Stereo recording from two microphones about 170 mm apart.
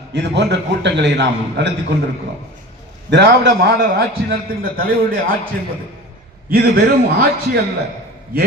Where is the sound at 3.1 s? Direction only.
85° right.